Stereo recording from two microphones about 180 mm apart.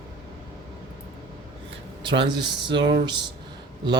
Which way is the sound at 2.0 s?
25° right (ahead or behind).